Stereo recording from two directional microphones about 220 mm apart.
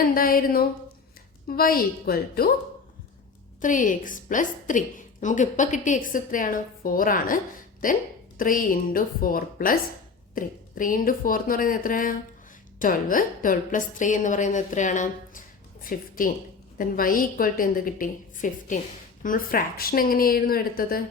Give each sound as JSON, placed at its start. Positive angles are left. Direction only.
{"t": 0.1, "sound": "a woman's voice", "side_deg": 40}
{"t": 3.6, "sound": "a woman's voice", "side_deg": 35}